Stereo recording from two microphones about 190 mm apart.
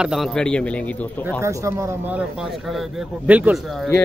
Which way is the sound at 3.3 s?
10° right (ahead or behind).